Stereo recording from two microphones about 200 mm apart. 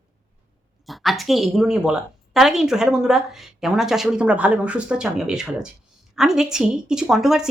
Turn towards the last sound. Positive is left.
turn(degrees=0)  # may be behind; listen again after turning